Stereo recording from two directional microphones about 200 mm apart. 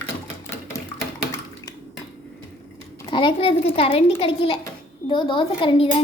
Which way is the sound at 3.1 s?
25° left (ahead or behind).